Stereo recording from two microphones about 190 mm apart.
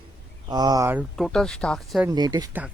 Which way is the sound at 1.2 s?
Centre (ahead or behind).